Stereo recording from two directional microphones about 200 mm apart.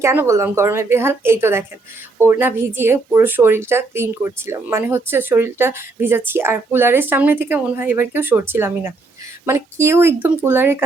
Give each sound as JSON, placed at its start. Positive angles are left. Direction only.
{"t": 0.0, "sound": "speech", "side_deg": -10}